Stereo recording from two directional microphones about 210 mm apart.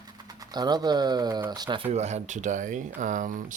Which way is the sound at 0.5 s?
20° right (ahead or behind).